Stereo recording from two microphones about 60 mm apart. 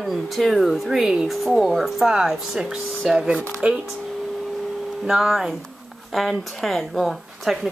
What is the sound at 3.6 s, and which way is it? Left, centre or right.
Speech, right.